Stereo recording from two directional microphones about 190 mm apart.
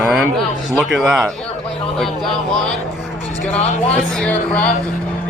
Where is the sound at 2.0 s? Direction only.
Centre (ahead or behind).